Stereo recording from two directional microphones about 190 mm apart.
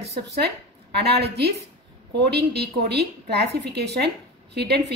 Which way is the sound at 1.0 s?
60° right (ahead or behind).